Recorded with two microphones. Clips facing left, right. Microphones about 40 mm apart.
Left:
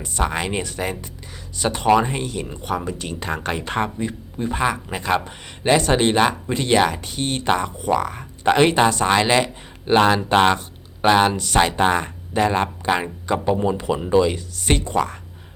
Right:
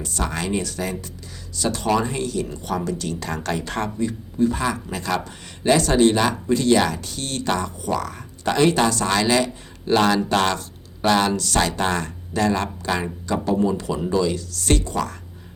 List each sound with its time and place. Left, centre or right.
0.0 s speech: left